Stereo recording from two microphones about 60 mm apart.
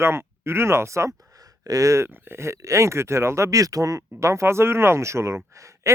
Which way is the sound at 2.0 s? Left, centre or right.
Right.